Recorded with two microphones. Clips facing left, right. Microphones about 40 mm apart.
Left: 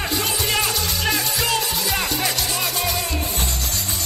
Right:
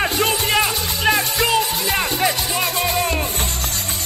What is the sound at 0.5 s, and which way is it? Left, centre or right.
Music, right.